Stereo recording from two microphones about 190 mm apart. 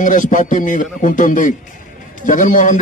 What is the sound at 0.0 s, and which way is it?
A man's voice, 45° left (ahead or behind).